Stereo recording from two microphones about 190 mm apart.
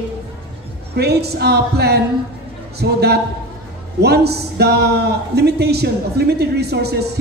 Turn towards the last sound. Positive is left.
turn(degrees=-60)  # may be behind; listen again after turning